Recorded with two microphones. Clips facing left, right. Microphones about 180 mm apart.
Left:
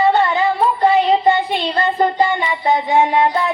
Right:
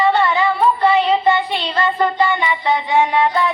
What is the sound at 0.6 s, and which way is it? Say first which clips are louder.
Child singing: left 1 dB; 35° left (ahead or behind).